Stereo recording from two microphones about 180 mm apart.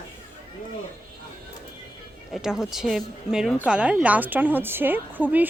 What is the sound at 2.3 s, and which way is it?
A woman's voice, centre (ahead or behind).